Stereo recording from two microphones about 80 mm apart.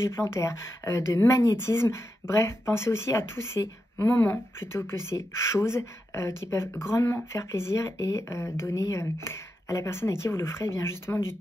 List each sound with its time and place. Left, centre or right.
0.0 s a woman's voice: left